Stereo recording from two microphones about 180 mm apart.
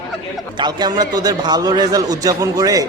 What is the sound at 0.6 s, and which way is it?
A man's voice, 25° right (ahead or behind).